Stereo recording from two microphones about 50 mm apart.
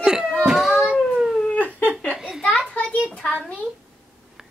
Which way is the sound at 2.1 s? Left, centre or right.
Centre.